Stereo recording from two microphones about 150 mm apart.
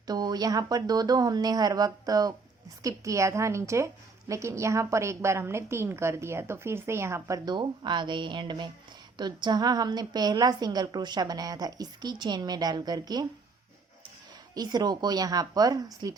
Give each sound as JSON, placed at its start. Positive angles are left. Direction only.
{"t": 0.1, "sound": "a woman's voice", "side_deg": -25}
{"t": 14.5, "sound": "a woman's voice", "side_deg": -25}